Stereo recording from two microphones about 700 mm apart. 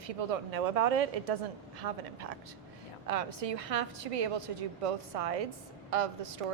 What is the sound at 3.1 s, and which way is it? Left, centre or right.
A woman's voice, right.